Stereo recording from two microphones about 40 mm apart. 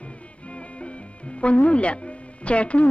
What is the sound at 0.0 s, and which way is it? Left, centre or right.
Music, left.